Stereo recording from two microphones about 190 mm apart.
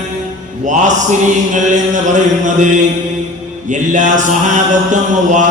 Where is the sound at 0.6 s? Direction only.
40° right (ahead or behind).